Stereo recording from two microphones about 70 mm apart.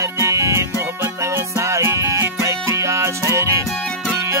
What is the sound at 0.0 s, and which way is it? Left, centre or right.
Music, right.